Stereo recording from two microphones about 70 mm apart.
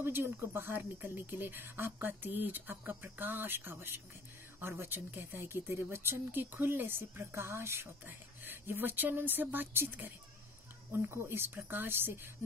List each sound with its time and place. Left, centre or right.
0.0 s speech: right